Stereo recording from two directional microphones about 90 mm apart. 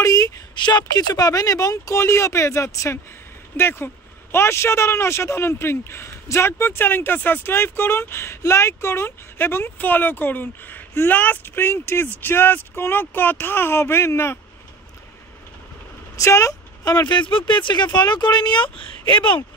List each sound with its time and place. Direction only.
0.0 s speech: 45° left (ahead or behind); by 14.4 s 30° left (ahead or behind)
16.2 s speech: 35° left (ahead or behind)
17.3 s speech: 70° left (ahead or behind)
18.8 s speech: 65° left (ahead or behind)